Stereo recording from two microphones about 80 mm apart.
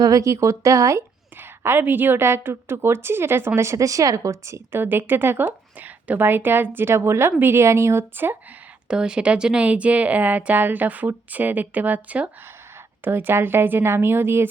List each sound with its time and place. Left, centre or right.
0.0 s a woman's voice: right
1.4 s a woman's voice: right
4.8 s a woman's voice: right
8.9 s speech: centre; by 14.4 s right